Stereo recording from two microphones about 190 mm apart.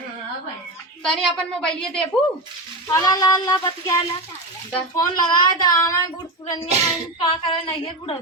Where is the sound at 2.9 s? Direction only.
20° left (ahead or behind).